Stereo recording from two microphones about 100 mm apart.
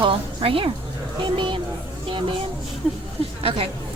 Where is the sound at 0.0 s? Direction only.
60° right (ahead or behind).